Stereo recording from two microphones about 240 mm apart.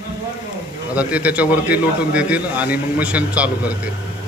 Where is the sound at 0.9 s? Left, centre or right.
Centre.